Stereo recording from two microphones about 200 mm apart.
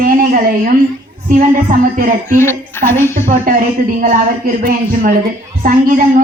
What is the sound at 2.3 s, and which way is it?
Speech, 10° left (ahead or behind).